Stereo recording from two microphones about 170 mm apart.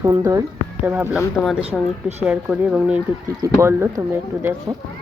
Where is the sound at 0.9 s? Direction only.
10° right (ahead or behind).